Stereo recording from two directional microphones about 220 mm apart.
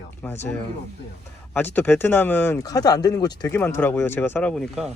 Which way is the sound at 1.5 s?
10° left (ahead or behind).